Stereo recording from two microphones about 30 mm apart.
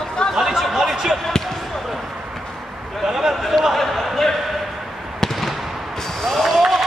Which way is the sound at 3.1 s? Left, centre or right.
Centre.